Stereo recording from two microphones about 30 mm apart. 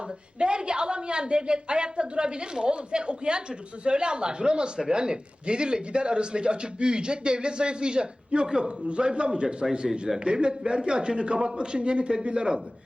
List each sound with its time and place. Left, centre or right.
0.3 s a man's voice: right